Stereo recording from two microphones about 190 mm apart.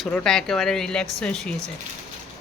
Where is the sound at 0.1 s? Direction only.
5° left (ahead or behind).